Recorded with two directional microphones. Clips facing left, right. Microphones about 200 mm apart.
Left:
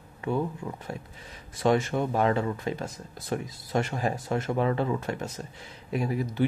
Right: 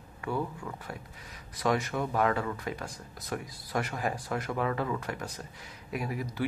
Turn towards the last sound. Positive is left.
turn(degrees=25)  # may be behind; listen again after turning